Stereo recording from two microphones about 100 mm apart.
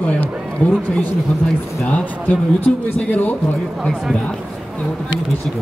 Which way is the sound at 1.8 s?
15° left (ahead or behind).